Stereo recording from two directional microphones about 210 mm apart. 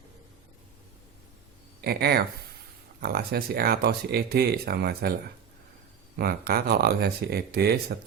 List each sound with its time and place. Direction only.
1.8 s speech: 50° right (ahead or behind)
6.1 s speech: 45° right (ahead or behind)